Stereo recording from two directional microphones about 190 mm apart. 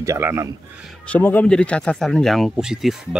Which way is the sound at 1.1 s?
10° left (ahead or behind).